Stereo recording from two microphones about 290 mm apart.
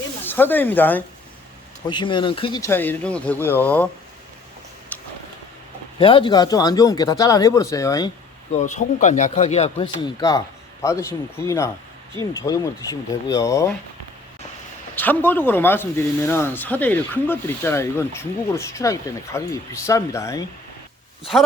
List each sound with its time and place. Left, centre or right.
0.3 s speech: centre
4.9 s a sound: centre
6.0 s speech: centre
8.5 s a man's voice: left
14.9 s speech: centre